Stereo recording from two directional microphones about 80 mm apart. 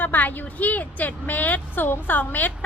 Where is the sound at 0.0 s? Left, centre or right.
Left.